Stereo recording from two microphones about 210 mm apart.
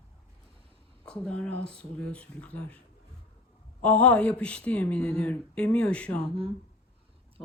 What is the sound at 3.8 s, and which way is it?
Speech, 5° left (ahead or behind).